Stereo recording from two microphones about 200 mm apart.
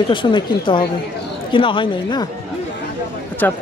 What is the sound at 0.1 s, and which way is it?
Speech, 25° left (ahead or behind).